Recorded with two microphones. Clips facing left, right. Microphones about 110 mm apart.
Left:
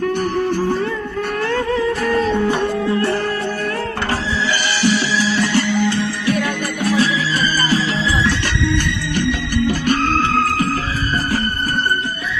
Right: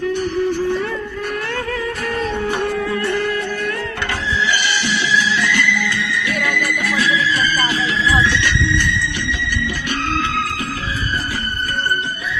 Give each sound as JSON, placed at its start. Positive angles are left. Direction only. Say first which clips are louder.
{"t": 0.1, "sound": "music", "louder": "left 1 dB", "side_deg": 45}
{"t": 1.5, "sound": "music", "louder": "left 5 dB", "side_deg": 30}
{"t": 4.7, "sound": "music", "louder": "left 2 dB", "side_deg": 40}